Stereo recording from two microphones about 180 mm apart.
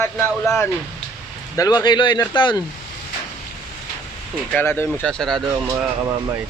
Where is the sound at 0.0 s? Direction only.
10° left (ahead or behind).